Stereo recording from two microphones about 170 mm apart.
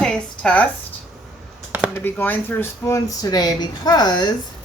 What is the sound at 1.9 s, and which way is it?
Speech, 10° left (ahead or behind).